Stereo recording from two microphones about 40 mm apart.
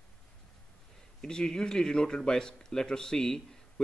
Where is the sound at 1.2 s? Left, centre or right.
Centre.